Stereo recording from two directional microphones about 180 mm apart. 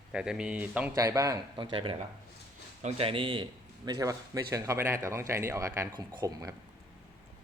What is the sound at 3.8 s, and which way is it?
Speech, 20° right (ahead or behind).